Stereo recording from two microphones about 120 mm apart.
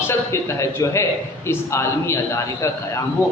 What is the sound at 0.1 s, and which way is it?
A man's voice, 25° left (ahead or behind).